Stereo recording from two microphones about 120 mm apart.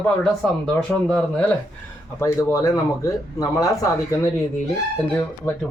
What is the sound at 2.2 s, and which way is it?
Speech, 25° left (ahead or behind).